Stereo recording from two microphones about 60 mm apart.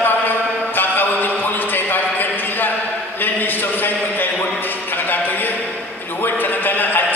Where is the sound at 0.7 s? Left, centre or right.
Left.